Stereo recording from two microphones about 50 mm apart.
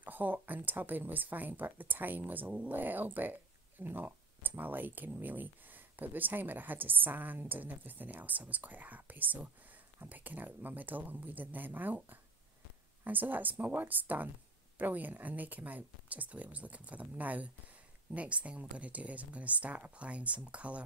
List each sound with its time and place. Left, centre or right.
0.0 s speech: right